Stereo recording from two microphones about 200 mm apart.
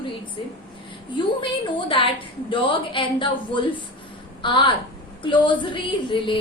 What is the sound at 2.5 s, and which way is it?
A woman's voice, 25° left (ahead or behind).